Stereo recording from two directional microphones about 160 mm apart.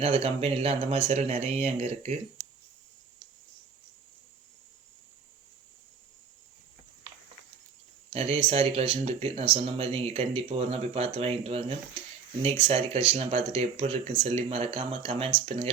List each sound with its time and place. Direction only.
0.0 s speech: 40° right (ahead or behind)
8.1 s speech: 40° right (ahead or behind)